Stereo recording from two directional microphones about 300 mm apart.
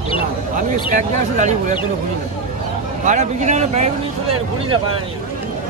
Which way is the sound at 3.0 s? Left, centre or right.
Right.